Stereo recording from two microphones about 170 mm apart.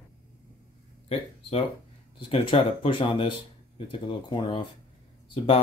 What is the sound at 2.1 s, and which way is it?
Speech, 35° left (ahead or behind).